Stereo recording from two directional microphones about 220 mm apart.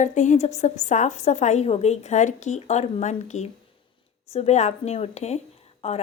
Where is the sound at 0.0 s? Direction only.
35° left (ahead or behind).